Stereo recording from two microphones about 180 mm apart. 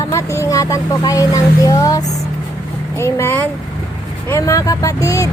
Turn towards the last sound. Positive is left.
turn(degrees=20)  # may be behind; listen again after turning